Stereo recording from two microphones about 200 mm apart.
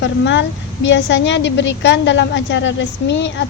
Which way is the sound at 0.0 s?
65° left (ahead or behind).